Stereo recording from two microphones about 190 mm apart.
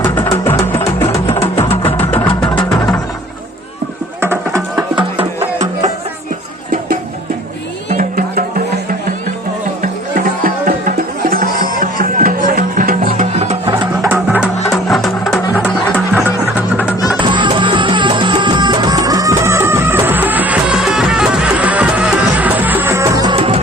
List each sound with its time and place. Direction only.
1.3 s music: 30° left (ahead or behind)
2.0 s music: 10° left (ahead or behind)
4.2 s music: 15° right (ahead or behind)
5.1 s music: 35° right (ahead or behind)
7.9 s music: 45° right (ahead or behind)
9.8 s music: 45° right (ahead or behind)
14.0 s music: 10° right (ahead or behind)
14.7 s music: centre (ahead or behind)
17.2 s music: 25° right (ahead or behind)
23.3 s music: 30° right (ahead or behind)